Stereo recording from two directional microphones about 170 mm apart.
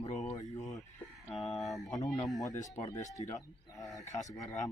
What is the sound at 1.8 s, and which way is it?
Speech, 20° left (ahead or behind).